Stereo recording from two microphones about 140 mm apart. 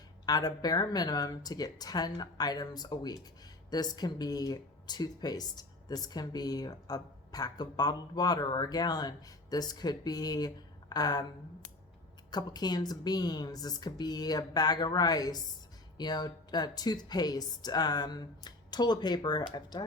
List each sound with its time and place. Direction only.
0.3 s speech: 30° left (ahead or behind)
12.3 s speech: 30° left (ahead or behind)